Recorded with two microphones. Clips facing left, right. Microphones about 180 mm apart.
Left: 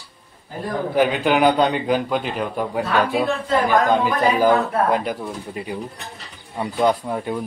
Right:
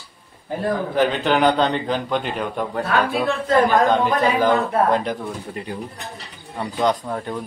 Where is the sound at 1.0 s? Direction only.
10° left (ahead or behind).